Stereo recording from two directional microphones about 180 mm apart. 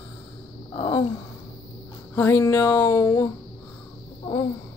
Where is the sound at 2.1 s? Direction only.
15° left (ahead or behind).